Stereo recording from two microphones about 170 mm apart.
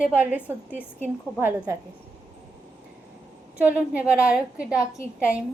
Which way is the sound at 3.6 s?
10° right (ahead or behind).